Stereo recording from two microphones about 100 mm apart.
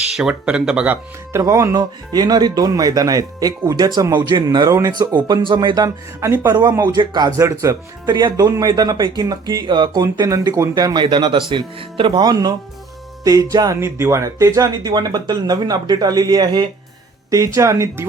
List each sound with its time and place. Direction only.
0.2 s speech: 10° right (ahead or behind)
1.4 s speech: 30° right (ahead or behind)
1.7 s speech: 40° right (ahead or behind)
4.7 s speech: 30° right (ahead or behind)
4.9 s speech: 50° right (ahead or behind)
5.7 s speech: 35° right (ahead or behind)
6.8 s speech: 45° right (ahead or behind)
7.3 s speech: 30° right (ahead or behind)
8.0 s speech: 45° right (ahead or behind)
12.2 s speech: 40° right (ahead or behind)
17.3 s speech: 30° right (ahead or behind)